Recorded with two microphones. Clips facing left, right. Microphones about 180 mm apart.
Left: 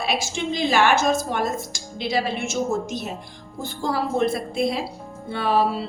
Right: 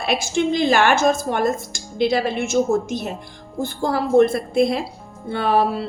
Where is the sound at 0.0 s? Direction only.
50° right (ahead or behind).